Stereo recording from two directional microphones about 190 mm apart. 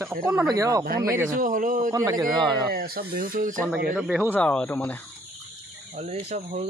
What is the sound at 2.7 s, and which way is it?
Speech, 55° right (ahead or behind).